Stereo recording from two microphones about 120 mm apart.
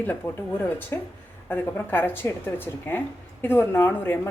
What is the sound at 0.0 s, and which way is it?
A woman's voice, 15° left (ahead or behind).